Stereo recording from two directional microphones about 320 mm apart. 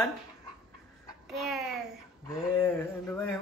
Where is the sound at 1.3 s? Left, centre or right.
Centre.